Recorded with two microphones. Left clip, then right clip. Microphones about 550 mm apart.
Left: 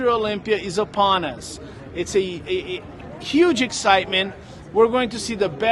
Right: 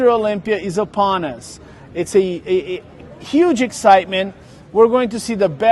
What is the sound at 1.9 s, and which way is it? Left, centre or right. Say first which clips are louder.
Speech: right 6 dB; right.